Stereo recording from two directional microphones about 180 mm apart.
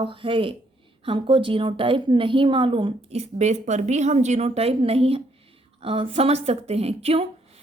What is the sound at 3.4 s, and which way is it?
A woman's voice, 40° right (ahead or behind).